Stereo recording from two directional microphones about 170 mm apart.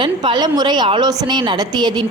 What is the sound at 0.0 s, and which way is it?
A woman's voice, 30° right (ahead or behind).